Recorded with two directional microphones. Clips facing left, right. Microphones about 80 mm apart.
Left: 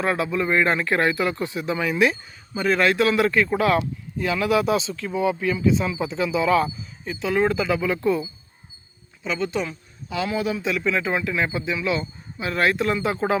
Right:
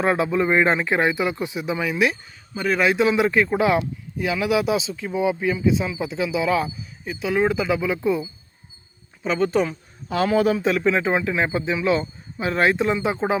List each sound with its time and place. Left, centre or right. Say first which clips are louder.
0.0 s speech: right 3 dB; right
9.2 s speech: right 5 dB; right; by 13.4 s centre